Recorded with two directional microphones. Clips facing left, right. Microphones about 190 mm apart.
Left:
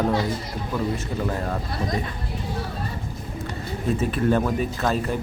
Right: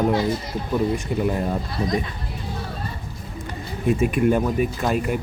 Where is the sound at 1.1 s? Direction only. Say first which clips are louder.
Right 4 dB; 15° right (ahead or behind).